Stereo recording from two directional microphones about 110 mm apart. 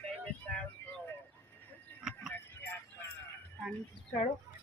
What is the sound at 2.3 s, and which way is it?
Music, 20° left (ahead or behind).